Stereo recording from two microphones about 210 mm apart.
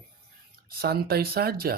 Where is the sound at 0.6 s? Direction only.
45° right (ahead or behind).